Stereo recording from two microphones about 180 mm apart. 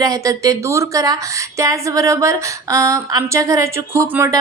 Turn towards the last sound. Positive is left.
turn(degrees=-15)  # may be behind; listen again after turning